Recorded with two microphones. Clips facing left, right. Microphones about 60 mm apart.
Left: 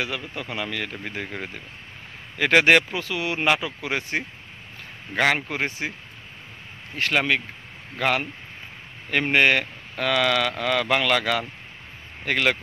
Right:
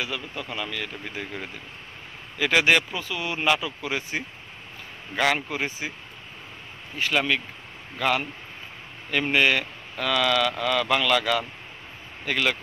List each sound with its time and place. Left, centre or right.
0.0 s speech: left
3.0 s speech: left
7.0 s speech: left